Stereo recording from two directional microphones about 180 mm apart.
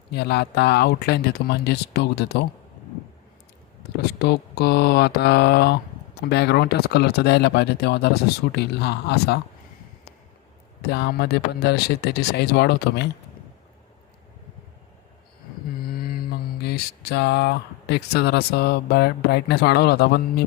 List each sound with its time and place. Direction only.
0.1 s speech: 65° left (ahead or behind)
3.9 s speech: 65° left (ahead or behind)
10.8 s speech: 65° left (ahead or behind)
15.9 s mantra: 55° left (ahead or behind)
16.6 s speech: 60° left (ahead or behind)